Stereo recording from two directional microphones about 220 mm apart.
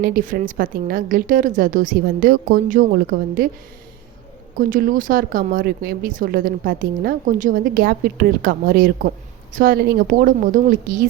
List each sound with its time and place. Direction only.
0.0 s speech: 40° right (ahead or behind)
4.5 s speech: 40° right (ahead or behind)